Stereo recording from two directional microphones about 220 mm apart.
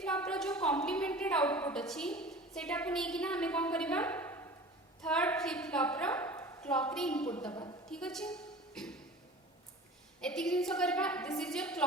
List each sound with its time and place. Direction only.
0.0 s a woman's voice: 5° left (ahead or behind)
7.5 s a woman's voice: 20° left (ahead or behind)
7.9 s a woman's voice: 5° left (ahead or behind)
10.2 s a woman's voice: 5° left (ahead or behind)